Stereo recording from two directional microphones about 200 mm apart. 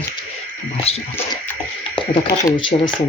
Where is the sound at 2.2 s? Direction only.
25° left (ahead or behind).